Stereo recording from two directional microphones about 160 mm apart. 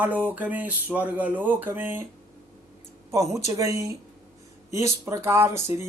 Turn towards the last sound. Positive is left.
turn(degrees=-15)  # may be behind; listen again after turning